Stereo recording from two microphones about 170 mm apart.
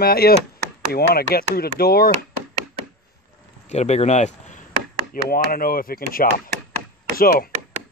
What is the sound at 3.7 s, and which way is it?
Speech, 40° left (ahead or behind).